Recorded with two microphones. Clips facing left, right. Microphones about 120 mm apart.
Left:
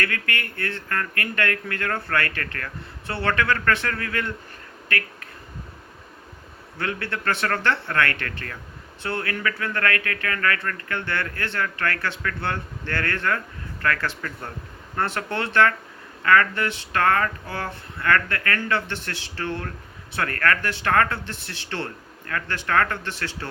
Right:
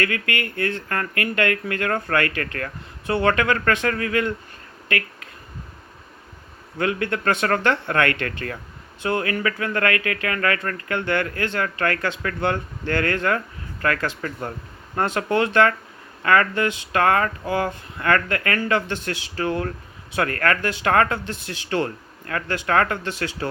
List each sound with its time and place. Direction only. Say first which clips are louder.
0.0 s speech: right 3 dB; 20° right (ahead or behind)
6.7 s speech: right 6 dB; 15° right (ahead or behind)